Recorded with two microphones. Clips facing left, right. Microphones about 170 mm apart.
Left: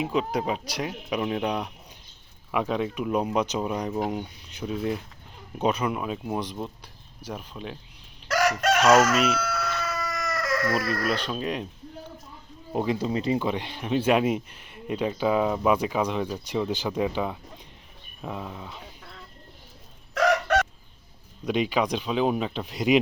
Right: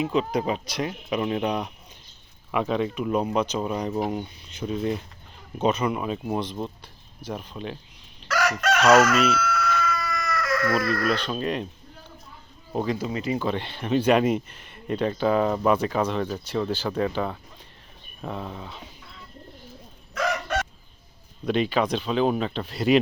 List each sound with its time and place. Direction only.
0.0 s speech: 5° left (ahead or behind)
2.5 s speech: 5° left (ahead or behind)
8.4 s chicken: 45° left (ahead or behind)
9.1 s speech: 15° left (ahead or behind)
9.4 s chicken: 35° left (ahead or behind)
10.1 s chicken: 40° left (ahead or behind)
11.1 s speech: 5° left (ahead or behind)
12.7 s speech: 15° left (ahead or behind)
13.0 s speech: 30° left (ahead or behind)
13.4 s speech: 10° left (ahead or behind)
20.1 s chicken: 80° left
21.4 s speech: 10° left (ahead or behind)